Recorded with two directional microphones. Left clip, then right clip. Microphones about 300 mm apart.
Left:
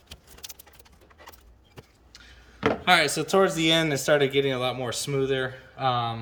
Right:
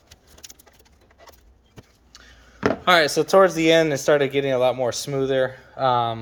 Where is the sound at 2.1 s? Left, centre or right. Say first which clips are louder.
Right 2 dB; centre.